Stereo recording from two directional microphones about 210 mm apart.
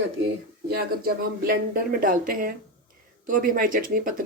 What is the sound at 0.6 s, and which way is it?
A woman's voice, 45° right (ahead or behind).